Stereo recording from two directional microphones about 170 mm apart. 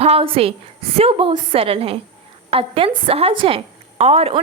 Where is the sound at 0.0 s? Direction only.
35° right (ahead or behind).